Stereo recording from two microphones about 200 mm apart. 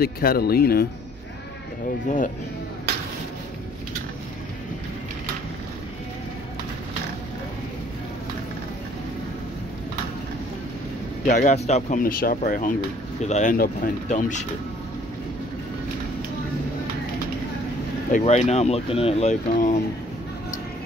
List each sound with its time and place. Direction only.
0.0 s speech: 50° left (ahead or behind)
2.0 s speech: 40° left (ahead or behind)
11.2 s speech: 35° left (ahead or behind)
18.1 s speech: 35° left (ahead or behind)